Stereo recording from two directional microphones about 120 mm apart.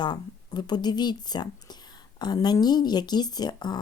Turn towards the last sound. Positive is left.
turn(degrees=35)  # may be behind; listen again after turning